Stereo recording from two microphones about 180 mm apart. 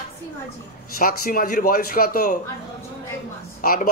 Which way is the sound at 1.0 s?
50° left (ahead or behind).